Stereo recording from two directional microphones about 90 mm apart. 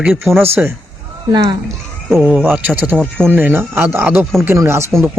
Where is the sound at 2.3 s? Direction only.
20° right (ahead or behind).